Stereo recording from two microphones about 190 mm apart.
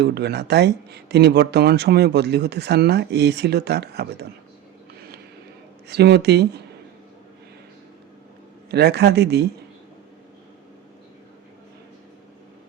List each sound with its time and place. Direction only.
0.0 s speech: 60° right (ahead or behind)
5.9 s speech: 60° right (ahead or behind)
8.7 s speech: 60° right (ahead or behind)